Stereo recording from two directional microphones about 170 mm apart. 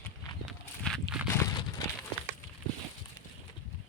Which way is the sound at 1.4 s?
15° left (ahead or behind).